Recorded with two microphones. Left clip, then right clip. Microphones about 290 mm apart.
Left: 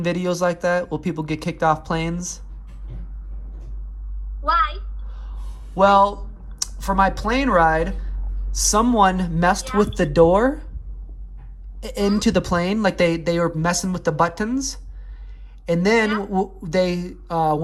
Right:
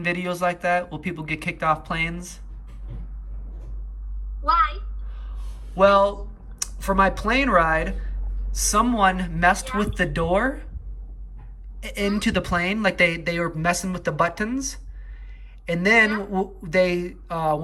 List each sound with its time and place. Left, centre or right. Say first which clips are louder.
0.0 s speech: left 3 dB; centre
4.4 s a woman's voice: left 1 dB; left
5.7 s speech: left 2 dB; centre
11.9 s speech: left 4 dB; centre